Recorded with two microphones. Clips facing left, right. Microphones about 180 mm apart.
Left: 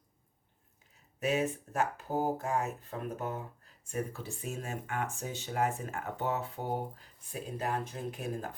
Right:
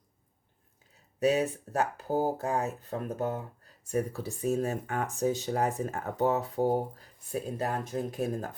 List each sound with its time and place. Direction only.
1.2 s speech: 35° right (ahead or behind)